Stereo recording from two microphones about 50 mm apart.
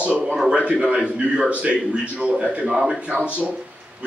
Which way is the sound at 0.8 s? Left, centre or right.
Right.